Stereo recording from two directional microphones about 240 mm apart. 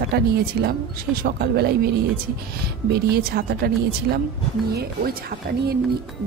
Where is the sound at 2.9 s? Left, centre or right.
Right.